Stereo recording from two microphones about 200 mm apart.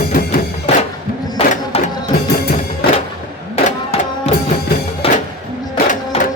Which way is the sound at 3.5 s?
30° left (ahead or behind).